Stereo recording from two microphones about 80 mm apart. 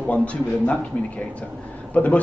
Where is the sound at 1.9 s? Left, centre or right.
Centre.